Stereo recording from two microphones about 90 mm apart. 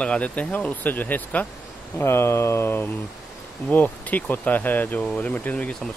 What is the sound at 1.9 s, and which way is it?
Speech, 30° left (ahead or behind).